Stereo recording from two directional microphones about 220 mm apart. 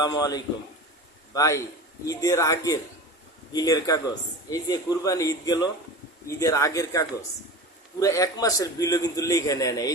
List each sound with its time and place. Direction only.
0.0 s a man's voice: 15° left (ahead or behind)